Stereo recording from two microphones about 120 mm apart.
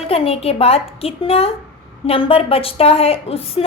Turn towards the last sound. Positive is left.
turn(degrees=55)  # may be behind; listen again after turning